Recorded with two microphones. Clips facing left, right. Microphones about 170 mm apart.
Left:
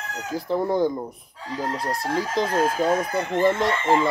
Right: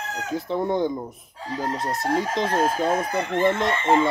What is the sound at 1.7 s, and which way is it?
Speech, 25° right (ahead or behind).